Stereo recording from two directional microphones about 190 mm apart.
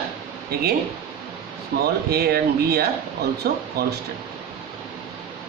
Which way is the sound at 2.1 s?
55° right (ahead or behind).